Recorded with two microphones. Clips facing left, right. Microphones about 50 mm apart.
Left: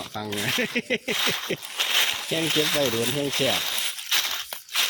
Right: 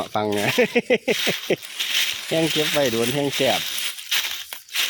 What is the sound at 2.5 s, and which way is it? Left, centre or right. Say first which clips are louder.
Speech: right 3 dB; centre.